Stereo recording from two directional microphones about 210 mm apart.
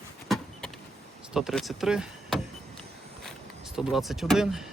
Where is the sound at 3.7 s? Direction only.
Centre (ahead or behind).